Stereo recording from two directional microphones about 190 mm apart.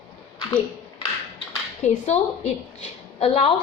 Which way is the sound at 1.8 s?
35° left (ahead or behind).